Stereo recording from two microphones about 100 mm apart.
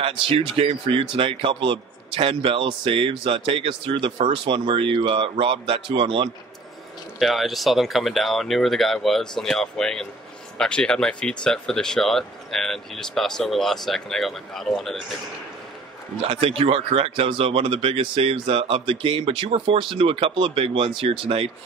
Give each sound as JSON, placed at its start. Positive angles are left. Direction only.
{"t": 0.0, "sound": "speech", "side_deg": -65}
{"t": 7.2, "sound": "speech", "side_deg": 0}
{"t": 16.3, "sound": "speech", "side_deg": -70}